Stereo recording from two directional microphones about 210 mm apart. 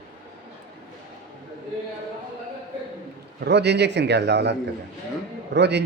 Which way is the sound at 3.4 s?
55° right (ahead or behind).